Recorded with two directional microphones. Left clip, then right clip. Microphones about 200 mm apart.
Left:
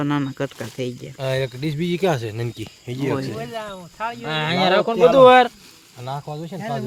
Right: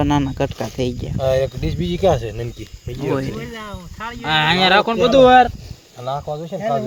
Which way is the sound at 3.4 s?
35° left (ahead or behind).